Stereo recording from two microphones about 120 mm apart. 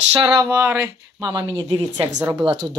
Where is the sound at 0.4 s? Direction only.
15° right (ahead or behind).